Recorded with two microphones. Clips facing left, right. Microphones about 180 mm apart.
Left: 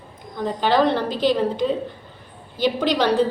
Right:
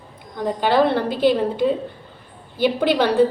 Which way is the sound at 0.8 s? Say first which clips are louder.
Right 2 dB; 55° right (ahead or behind).